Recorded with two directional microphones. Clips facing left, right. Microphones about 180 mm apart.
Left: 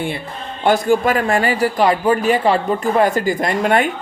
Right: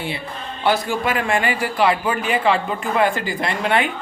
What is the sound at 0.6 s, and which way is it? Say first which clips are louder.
A man's voice: left 6 dB; 45° left (ahead or behind).